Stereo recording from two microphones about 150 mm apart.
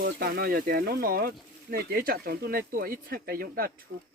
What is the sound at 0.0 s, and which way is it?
Speech, 90° right.